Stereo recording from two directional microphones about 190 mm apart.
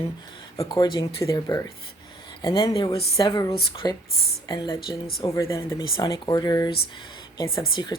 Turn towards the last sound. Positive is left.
turn(degrees=20)  # may be behind; listen again after turning